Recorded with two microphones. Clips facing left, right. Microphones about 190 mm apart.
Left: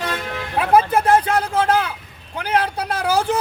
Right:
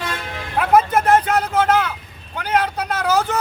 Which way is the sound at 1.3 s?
30° left (ahead or behind).